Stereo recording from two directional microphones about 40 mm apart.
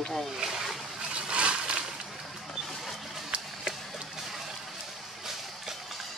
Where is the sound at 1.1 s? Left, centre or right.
Right.